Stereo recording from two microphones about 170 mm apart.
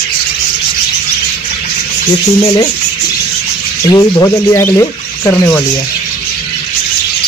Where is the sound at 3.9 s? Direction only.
20° left (ahead or behind).